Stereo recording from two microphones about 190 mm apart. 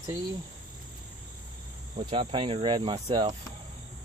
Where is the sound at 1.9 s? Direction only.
30° right (ahead or behind).